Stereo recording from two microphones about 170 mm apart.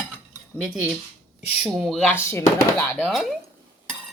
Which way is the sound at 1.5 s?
5° right (ahead or behind).